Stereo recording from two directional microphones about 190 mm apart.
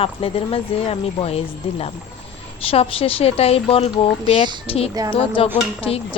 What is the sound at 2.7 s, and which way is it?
A woman's voice, 30° left (ahead or behind).